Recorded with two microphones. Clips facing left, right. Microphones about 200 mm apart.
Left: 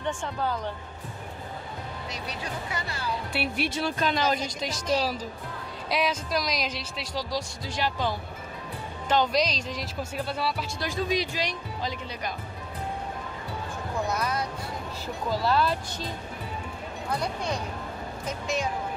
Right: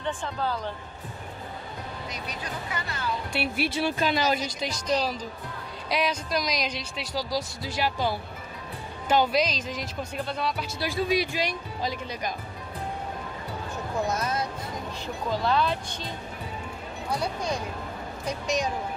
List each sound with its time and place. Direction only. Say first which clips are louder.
0.0 s speech: even; 15° left (ahead or behind)
2.0 s speech: left 2 dB; 30° left (ahead or behind)
3.3 s speech: right 1 dB; 5° right (ahead or behind)
10.8 s speech: right 3 dB; 5° right (ahead or behind)
14.1 s speech: even; 25° right (ahead or behind)
15.2 s speech: even; 5° left (ahead or behind)
17.1 s speech: right 1 dB; 10° right (ahead or behind)